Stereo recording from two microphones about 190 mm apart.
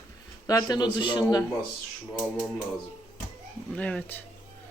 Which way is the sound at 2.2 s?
10° right (ahead or behind).